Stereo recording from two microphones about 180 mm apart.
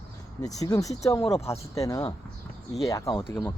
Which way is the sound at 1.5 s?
15° left (ahead or behind).